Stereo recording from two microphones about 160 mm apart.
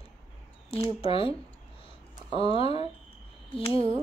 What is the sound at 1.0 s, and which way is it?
Speech, 35° left (ahead or behind).